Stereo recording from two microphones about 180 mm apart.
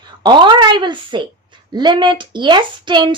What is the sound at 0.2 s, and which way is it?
A child's voice, 25° right (ahead or behind).